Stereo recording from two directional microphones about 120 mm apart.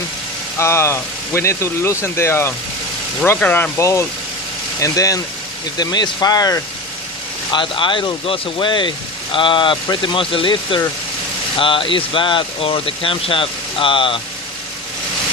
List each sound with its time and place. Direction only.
0.6 s speech: 20° left (ahead or behind)
7.5 s speech: 45° left (ahead or behind)